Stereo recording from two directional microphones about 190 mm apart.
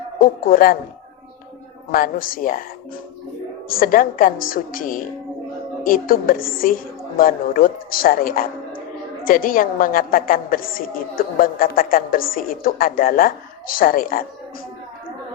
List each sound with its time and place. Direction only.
0.2 s a woman's voice: 50° left (ahead or behind)
1.9 s a woman's voice: 50° left (ahead or behind)